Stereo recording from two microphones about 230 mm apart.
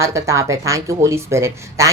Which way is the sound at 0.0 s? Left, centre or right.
Centre.